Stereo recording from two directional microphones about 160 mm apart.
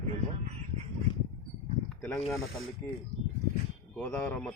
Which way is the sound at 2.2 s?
Centre (ahead or behind).